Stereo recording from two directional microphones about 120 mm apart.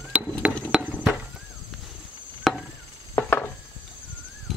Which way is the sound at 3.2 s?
15° left (ahead or behind).